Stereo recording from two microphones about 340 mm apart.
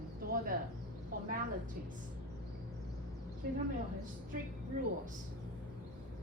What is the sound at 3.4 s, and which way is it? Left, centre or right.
Speech, right.